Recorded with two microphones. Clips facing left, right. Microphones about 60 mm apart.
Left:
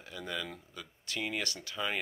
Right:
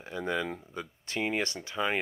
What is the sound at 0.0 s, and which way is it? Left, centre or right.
Speech, right.